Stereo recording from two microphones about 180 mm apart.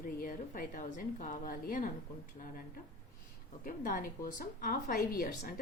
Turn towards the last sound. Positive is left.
turn(degrees=55)  # may be behind; listen again after turning